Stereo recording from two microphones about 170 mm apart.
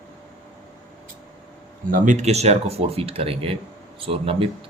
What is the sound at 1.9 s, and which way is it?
Speech, 45° right (ahead or behind).